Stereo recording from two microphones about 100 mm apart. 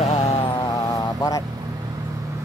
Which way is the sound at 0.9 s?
35° left (ahead or behind).